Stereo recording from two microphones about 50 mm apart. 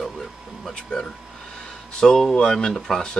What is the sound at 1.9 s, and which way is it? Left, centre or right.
Speech, centre.